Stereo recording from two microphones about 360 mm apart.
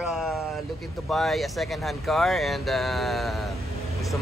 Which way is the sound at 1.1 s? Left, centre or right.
Centre.